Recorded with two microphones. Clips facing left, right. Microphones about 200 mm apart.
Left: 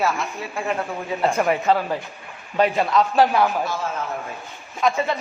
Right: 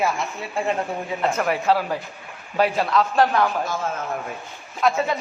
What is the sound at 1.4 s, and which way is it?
A woman's voice, centre (ahead or behind).